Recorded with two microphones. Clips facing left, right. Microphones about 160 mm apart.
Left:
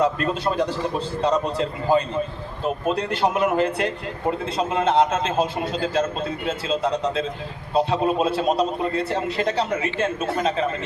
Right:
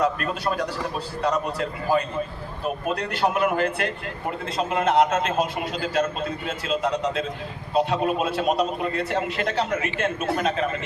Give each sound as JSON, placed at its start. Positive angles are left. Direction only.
{"t": 0.0, "sound": "a man's voice", "side_deg": 25}